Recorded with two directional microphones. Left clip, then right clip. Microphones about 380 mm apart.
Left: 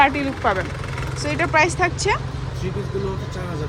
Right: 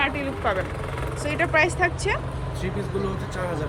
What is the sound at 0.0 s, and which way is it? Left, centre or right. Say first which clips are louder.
Speech: left 7 dB; centre.